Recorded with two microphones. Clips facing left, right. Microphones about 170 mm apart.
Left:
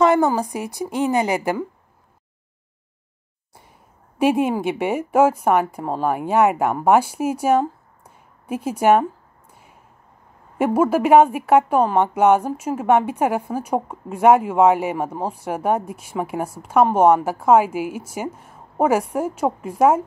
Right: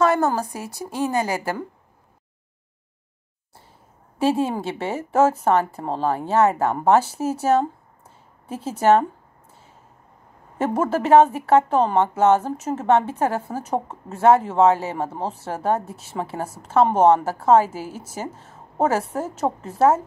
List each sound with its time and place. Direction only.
0.0 s a woman's voice: 15° left (ahead or behind)
4.2 s a woman's voice: 15° left (ahead or behind)
9.5 s a sound: 15° left (ahead or behind)
10.6 s a woman's voice: 10° left (ahead or behind)